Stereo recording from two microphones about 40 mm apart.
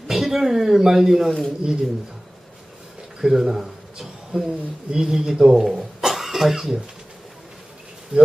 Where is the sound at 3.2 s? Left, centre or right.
Centre.